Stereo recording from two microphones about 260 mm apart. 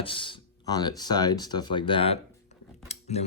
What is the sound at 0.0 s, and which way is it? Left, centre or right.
Speech, centre.